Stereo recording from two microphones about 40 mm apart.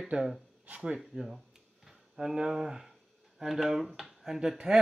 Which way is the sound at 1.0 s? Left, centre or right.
Centre.